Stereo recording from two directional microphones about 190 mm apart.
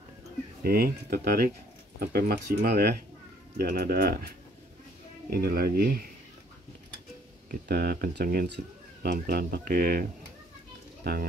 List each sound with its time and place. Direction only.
0.7 s speech: 55° right (ahead or behind)
7.6 s speech: 55° right (ahead or behind)
11.1 s speech: 55° right (ahead or behind)